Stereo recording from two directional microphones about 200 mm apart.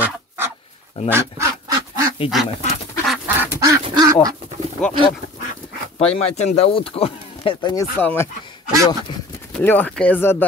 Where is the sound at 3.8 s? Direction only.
20° right (ahead or behind).